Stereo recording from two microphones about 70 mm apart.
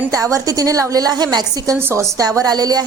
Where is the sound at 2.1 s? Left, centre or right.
Right.